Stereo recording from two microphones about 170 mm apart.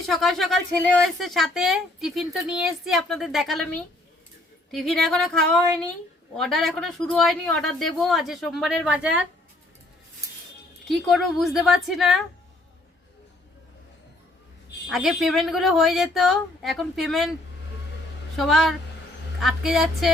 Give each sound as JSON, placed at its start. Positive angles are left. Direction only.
{"t": 0.0, "sound": "speech", "side_deg": 0}
{"t": 4.7, "sound": "speech", "side_deg": 5}
{"t": 10.8, "sound": "speech", "side_deg": 0}
{"t": 14.8, "sound": "speech", "side_deg": 0}
{"t": 18.3, "sound": "speech", "side_deg": 0}